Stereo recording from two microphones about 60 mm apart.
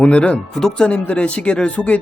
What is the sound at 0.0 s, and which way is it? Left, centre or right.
Speech, left.